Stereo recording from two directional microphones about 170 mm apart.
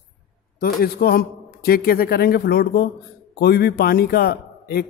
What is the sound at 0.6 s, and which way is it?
A man's voice, 60° left (ahead or behind).